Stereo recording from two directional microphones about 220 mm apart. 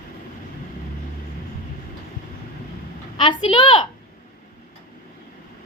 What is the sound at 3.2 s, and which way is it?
Speech, 20° left (ahead or behind).